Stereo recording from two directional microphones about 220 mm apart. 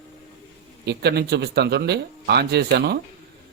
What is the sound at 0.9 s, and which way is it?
A man's voice, 50° right (ahead or behind).